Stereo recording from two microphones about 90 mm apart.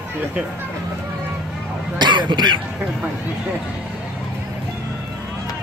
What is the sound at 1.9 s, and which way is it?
Speech, 55° right (ahead or behind).